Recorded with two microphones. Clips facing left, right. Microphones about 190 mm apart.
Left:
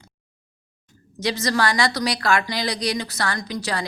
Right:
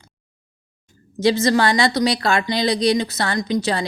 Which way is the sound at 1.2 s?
25° right (ahead or behind).